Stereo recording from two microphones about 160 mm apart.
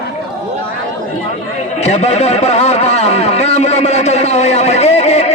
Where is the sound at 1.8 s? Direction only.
40° left (ahead or behind).